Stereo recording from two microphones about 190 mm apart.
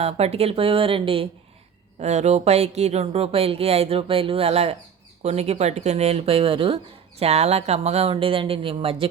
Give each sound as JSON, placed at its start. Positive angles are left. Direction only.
{"t": 0.0, "sound": "speech", "side_deg": -30}